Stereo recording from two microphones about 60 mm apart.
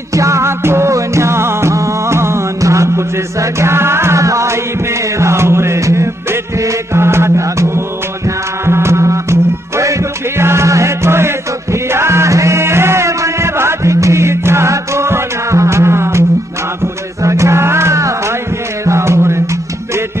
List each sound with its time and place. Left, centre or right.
0.1 s music: right
5.2 s music: right
10.3 s music: right